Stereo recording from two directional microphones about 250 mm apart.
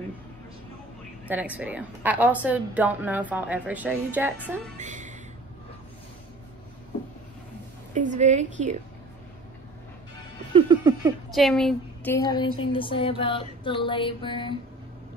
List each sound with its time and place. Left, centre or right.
1.3 s a woman's voice: centre
4.7 s a woman's voice: right
7.9 s a woman's voice: right
10.5 s music: centre
11.3 s a woman's voice: centre
12.7 s music: left